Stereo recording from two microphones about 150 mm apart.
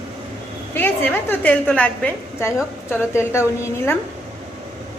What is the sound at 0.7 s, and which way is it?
A woman's voice, 15° left (ahead or behind).